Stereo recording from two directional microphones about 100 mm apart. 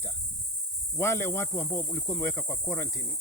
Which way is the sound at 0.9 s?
25° left (ahead or behind).